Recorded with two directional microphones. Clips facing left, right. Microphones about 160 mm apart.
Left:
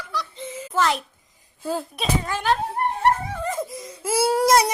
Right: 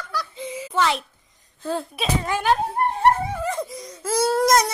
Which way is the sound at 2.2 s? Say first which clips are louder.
Right 4 dB; 10° right (ahead or behind).